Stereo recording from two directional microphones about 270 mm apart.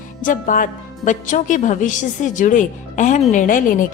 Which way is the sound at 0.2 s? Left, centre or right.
Left.